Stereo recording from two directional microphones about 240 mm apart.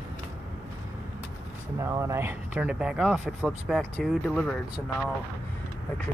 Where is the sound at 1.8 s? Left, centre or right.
Centre.